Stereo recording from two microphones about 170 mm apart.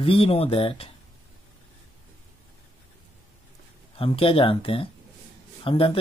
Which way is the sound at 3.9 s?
35° left (ahead or behind).